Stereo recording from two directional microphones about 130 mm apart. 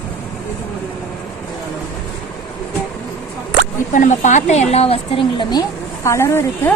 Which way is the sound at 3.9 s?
75° left (ahead or behind).